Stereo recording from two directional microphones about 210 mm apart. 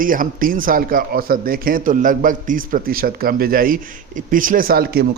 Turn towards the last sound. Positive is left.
turn(degrees=-45)  # may be behind; listen again after turning